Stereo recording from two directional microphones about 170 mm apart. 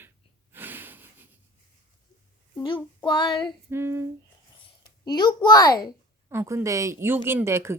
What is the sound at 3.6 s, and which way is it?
Speech, 15° right (ahead or behind).